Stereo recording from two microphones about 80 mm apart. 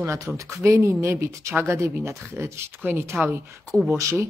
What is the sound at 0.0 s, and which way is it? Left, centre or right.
Speech, right.